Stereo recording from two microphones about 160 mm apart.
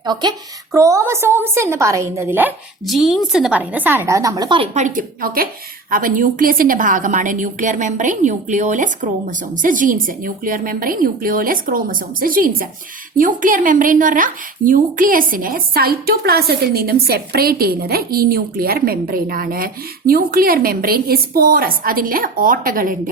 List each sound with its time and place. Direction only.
0.0 s a woman's voice: 25° right (ahead or behind)
2.8 s a woman's voice: centre (ahead or behind); by 4.7 s 30° right (ahead or behind)
4.7 s a woman's voice: 50° right (ahead or behind)